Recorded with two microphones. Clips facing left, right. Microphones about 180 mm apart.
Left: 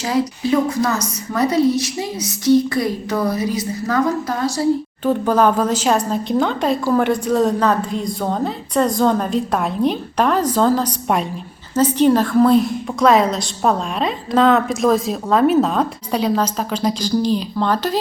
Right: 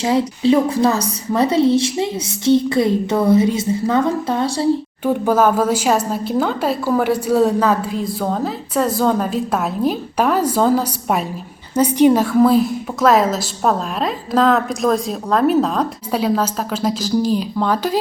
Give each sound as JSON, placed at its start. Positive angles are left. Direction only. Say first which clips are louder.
{"t": 0.0, "sound": "a woman's voice", "louder": "right 3 dB", "side_deg": -25}
{"t": 5.0, "sound": "a woman's voice", "louder": "even", "side_deg": -10}